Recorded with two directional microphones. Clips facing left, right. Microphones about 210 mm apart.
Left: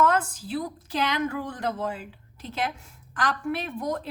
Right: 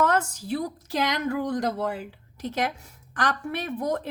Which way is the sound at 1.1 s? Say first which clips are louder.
Right 3 dB; 40° right (ahead or behind).